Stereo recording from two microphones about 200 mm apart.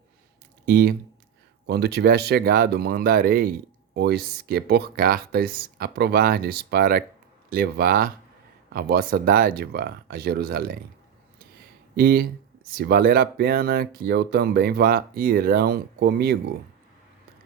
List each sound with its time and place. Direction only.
0.6 s speech: 50° right (ahead or behind)
11.5 s a sound: 50° right (ahead or behind)
12.6 s speech: 50° right (ahead or behind)